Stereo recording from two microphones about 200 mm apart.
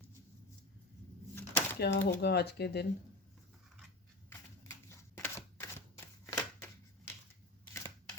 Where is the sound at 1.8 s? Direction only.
55° left (ahead or behind).